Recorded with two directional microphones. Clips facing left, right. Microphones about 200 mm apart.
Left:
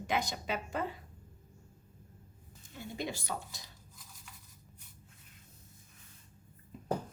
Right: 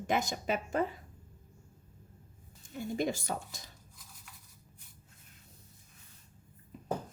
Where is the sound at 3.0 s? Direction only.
45° right (ahead or behind).